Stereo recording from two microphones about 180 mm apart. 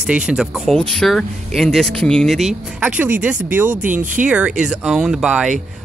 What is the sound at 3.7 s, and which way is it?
Speech, 45° right (ahead or behind).